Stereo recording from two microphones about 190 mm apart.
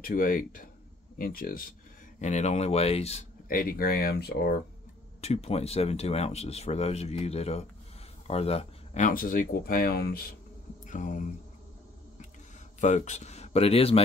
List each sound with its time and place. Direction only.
0.0 s speech: 50° left (ahead or behind)
2.1 s speech: 40° left (ahead or behind)
3.4 s speech: 50° left (ahead or behind)
5.2 s speech: 30° left (ahead or behind); by 10.2 s 50° left (ahead or behind)
10.9 s a sound: 40° left (ahead or behind)
12.8 s speech: 40° left (ahead or behind)